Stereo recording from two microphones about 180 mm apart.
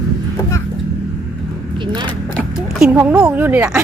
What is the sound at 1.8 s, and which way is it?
Speech, 25° right (ahead or behind).